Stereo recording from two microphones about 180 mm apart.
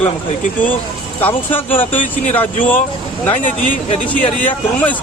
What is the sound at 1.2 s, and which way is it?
Speech, 10° left (ahead or behind).